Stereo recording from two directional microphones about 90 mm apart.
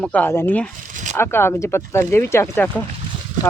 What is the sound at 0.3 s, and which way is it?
Speech, 25° left (ahead or behind).